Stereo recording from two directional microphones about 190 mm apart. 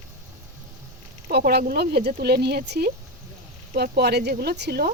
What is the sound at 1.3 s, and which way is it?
Speech, 55° right (ahead or behind).